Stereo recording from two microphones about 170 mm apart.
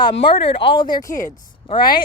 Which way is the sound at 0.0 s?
30° left (ahead or behind).